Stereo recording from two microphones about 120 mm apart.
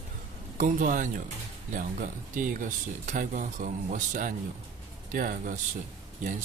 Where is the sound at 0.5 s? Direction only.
90° right.